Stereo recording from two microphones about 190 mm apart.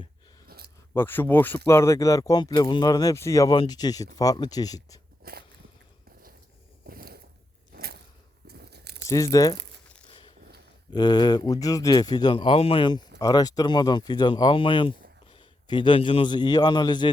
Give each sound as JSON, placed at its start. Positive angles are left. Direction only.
{"t": 0.4, "sound": "a sound", "side_deg": -55}
{"t": 0.9, "sound": "speech", "side_deg": 10}
{"t": 5.2, "sound": "walk", "side_deg": -55}
{"t": 6.8, "sound": "a sound", "side_deg": -55}
{"t": 8.4, "sound": "crunch", "side_deg": -60}
{"t": 9.0, "sound": "speech", "side_deg": 15}
{"t": 10.9, "sound": "a man's voice", "side_deg": 20}